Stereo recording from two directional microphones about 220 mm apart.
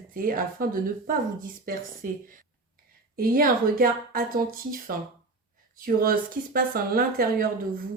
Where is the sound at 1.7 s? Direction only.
40° right (ahead or behind).